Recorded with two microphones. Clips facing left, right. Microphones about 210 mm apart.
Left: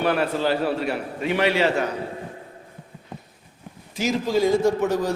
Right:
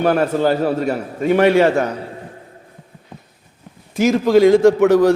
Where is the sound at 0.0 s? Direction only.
45° right (ahead or behind).